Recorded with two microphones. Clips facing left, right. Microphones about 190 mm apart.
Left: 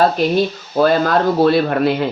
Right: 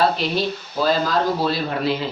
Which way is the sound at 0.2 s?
55° left (ahead or behind).